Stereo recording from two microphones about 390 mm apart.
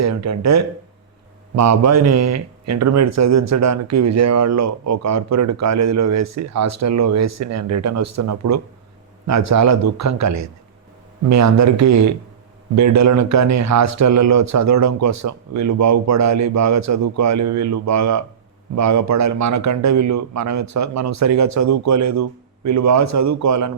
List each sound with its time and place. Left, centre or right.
0.0 s a man's voice: right